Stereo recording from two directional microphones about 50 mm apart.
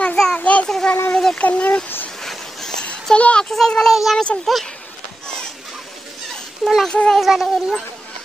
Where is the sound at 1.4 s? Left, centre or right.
Left.